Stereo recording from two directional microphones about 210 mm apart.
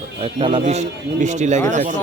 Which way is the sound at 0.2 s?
25° right (ahead or behind).